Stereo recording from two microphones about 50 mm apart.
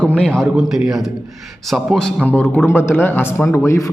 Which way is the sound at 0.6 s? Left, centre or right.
Centre.